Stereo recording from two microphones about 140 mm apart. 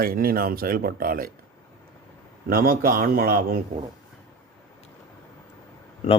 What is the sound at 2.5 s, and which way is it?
Speech, 90° right.